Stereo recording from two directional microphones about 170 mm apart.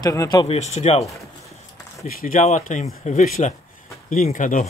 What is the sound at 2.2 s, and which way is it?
Speech, 50° left (ahead or behind).